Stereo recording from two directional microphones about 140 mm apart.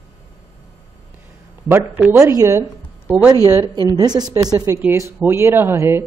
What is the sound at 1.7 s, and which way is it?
Speech, 10° right (ahead or behind).